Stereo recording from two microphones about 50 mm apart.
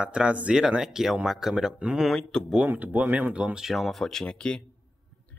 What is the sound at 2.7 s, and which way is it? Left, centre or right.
Speech, right.